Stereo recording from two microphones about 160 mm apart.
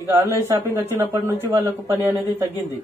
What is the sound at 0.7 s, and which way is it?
Speech, 15° right (ahead or behind).